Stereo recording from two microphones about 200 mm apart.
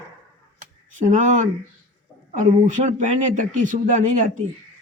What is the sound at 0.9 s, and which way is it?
Speech, 35° right (ahead or behind).